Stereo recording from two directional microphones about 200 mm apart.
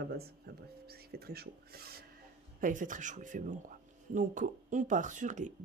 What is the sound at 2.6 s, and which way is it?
Speech, 40° right (ahead or behind).